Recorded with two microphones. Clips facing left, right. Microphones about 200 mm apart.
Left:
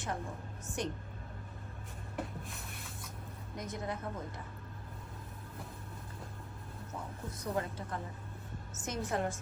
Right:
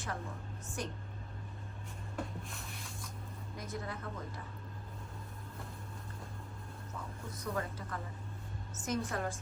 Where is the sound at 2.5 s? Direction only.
Centre (ahead or behind).